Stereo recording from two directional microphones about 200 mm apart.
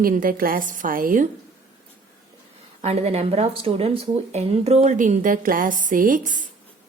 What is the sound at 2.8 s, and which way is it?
Speech, 35° right (ahead or behind).